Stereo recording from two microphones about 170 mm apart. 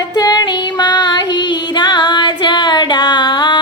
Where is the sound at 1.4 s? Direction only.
25° left (ahead or behind).